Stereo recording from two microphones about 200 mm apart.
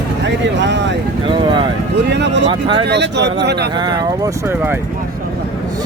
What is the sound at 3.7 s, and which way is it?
Speech, 20° right (ahead or behind).